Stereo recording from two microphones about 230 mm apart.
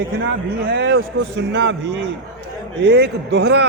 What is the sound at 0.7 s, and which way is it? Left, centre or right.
A man's voice, right.